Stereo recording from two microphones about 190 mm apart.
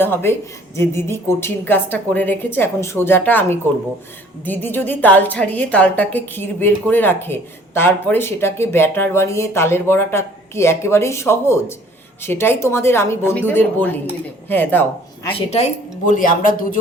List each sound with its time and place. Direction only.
0.0 s a woman's voice: 10° left (ahead or behind)
15.3 s speech: 30° left (ahead or behind)